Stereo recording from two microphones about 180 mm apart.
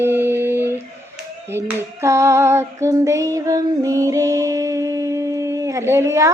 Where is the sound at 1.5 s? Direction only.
15° right (ahead or behind).